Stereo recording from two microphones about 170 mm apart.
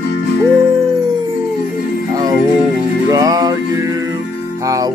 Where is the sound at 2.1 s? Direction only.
20° right (ahead or behind).